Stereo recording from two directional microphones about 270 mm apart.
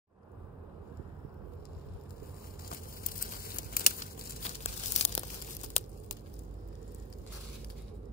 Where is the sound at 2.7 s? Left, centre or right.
Left.